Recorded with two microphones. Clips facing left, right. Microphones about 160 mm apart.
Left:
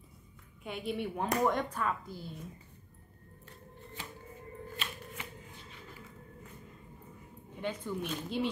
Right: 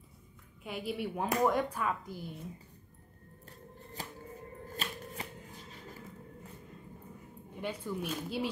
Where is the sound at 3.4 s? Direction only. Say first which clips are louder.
Right 1 dB; 40° right (ahead or behind).